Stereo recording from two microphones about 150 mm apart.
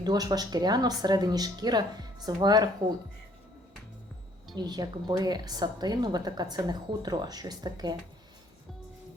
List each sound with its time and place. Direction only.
0.0 s a woman's voice: 25° right (ahead or behind)
4.5 s a woman's voice: 25° right (ahead or behind)